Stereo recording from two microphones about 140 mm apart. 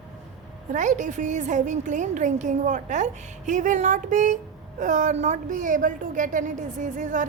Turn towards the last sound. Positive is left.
turn(degrees=-65)  # may be behind; listen again after turning